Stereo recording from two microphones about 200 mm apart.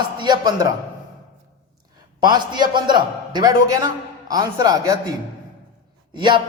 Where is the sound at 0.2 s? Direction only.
20° right (ahead or behind).